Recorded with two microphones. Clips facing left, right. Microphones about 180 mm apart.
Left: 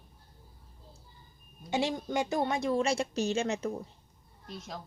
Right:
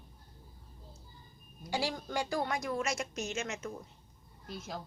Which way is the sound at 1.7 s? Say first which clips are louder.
Left 4 dB; 20° left (ahead or behind).